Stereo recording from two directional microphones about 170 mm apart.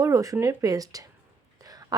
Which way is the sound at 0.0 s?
20° right (ahead or behind).